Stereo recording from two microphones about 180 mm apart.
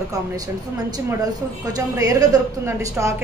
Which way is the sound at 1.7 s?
20° right (ahead or behind).